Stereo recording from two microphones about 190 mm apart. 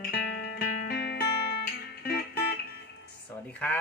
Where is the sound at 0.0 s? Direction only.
60° left (ahead or behind).